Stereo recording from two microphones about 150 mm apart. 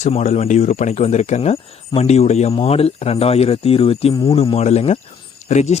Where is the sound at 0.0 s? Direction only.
50° left (ahead or behind).